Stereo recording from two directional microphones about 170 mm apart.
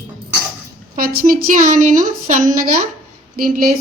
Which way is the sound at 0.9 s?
60° right (ahead or behind).